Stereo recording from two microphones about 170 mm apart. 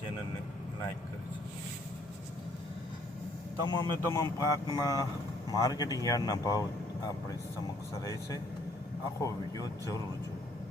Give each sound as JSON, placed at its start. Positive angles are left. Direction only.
{"t": 3.7, "sound": "speech", "side_deg": 20}